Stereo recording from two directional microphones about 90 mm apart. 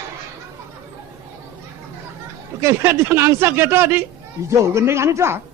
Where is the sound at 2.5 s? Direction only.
30° right (ahead or behind).